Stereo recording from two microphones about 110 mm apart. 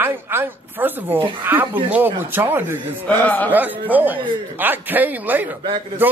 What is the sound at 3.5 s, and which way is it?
Speech, 15° right (ahead or behind).